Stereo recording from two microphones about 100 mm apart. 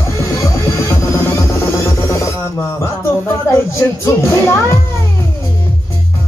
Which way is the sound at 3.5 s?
30° left (ahead or behind).